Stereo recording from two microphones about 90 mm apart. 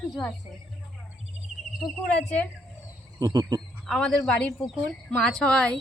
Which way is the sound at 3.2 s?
45° right (ahead or behind).